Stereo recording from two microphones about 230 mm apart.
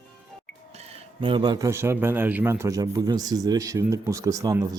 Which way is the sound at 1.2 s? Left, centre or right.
Right.